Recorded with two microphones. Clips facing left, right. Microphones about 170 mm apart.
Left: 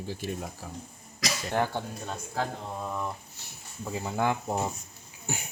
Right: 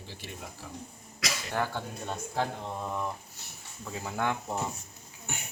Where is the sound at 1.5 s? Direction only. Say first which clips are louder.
Left 4 dB; 20° left (ahead or behind).